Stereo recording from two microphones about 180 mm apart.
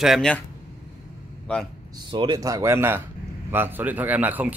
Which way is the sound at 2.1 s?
25° right (ahead or behind).